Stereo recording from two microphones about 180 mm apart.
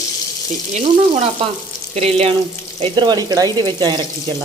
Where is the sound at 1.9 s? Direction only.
35° right (ahead or behind).